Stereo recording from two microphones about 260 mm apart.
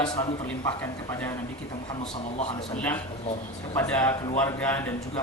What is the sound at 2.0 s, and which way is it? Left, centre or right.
Speech, left.